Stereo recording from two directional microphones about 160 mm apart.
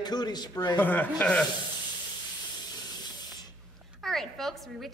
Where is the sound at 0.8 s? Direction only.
10° left (ahead or behind).